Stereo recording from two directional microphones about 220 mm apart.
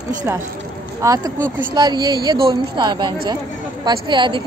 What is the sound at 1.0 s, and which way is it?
A woman's voice, 15° right (ahead or behind).